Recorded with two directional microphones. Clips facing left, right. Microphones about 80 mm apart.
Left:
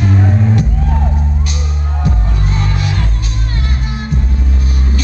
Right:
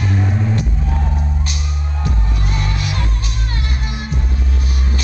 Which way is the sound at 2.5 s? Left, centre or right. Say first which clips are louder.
Left 4 dB; left.